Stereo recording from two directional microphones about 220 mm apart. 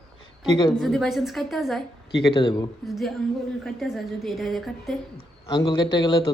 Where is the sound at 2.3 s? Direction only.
20° left (ahead or behind).